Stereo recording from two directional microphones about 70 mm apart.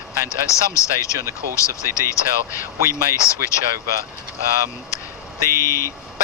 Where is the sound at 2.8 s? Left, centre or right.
Right.